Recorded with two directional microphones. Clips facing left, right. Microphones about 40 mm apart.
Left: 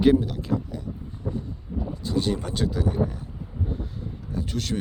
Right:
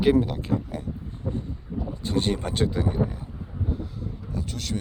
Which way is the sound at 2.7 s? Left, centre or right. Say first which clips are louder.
Even; right.